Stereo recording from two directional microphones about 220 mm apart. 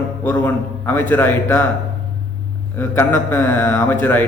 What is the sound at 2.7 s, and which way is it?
A man's voice, 10° left (ahead or behind).